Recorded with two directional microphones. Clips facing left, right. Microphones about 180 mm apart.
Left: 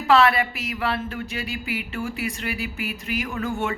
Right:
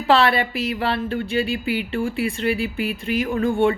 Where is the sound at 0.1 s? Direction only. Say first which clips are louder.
Right 1 dB; 30° right (ahead or behind).